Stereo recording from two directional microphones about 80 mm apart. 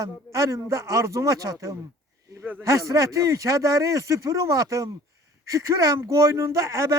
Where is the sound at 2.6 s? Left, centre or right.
Right.